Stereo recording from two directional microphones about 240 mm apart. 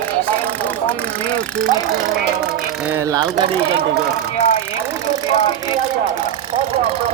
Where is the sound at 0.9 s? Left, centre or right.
Centre.